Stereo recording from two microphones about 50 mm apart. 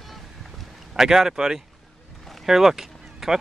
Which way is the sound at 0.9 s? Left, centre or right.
Centre.